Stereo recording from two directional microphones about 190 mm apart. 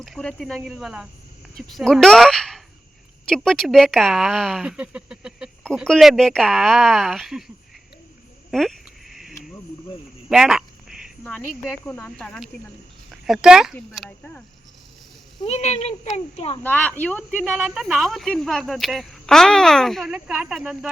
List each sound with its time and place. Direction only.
0.0 s speech: 5° left (ahead or behind)
8.4 s a sound: centre (ahead or behind)
11.9 s speech: 5° left (ahead or behind)
15.4 s speech: 35° left (ahead or behind)
16.6 s speech: 10° left (ahead or behind)